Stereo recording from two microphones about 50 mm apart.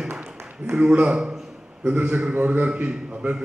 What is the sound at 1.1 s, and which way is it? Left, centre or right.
Speech, centre.